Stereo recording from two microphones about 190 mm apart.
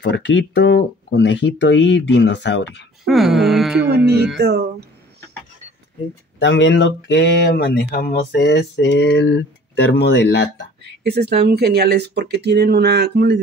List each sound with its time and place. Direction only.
0.0 s speech: 65° left (ahead or behind)
3.1 s speech: centre (ahead or behind)
3.9 s speech: 60° right (ahead or behind)
6.4 s speech: 65° left (ahead or behind)
10.8 s speech: 60° right (ahead or behind)